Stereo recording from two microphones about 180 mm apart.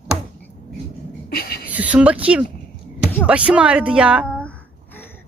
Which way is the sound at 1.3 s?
60° left (ahead or behind).